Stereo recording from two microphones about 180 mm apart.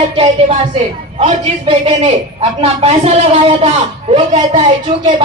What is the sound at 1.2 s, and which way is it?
A man's voice, 30° right (ahead or behind).